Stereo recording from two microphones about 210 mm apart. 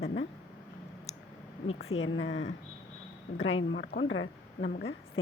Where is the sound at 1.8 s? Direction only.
70° left (ahead or behind).